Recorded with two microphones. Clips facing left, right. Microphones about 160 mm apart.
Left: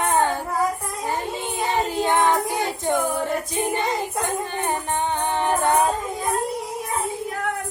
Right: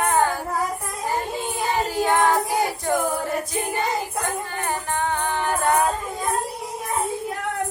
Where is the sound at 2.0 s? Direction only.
20° left (ahead or behind).